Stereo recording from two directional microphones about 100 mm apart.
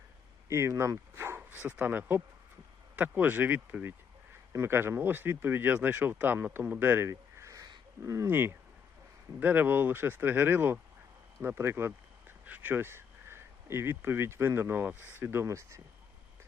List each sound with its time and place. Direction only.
0.4 s speech: 30° right (ahead or behind)
7.1 s a sound: 35° right (ahead or behind)
8.0 s speech: 30° right (ahead or behind)